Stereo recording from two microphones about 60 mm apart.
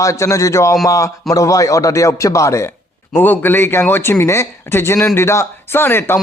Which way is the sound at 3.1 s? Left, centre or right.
Left.